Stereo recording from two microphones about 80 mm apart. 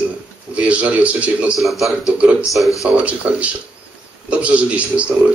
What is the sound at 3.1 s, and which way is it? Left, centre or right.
A man's voice, centre.